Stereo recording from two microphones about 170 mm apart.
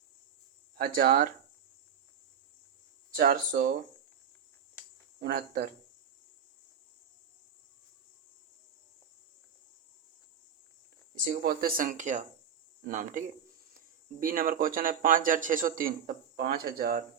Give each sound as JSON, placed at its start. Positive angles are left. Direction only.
{"t": 0.8, "sound": "a man's voice", "side_deg": -55}
{"t": 3.2, "sound": "speech", "side_deg": -55}
{"t": 5.2, "sound": "a man's voice", "side_deg": -65}
{"t": 11.4, "sound": "a man's voice", "side_deg": -60}